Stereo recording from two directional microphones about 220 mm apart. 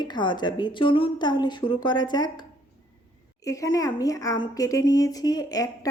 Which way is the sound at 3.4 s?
15° left (ahead or behind).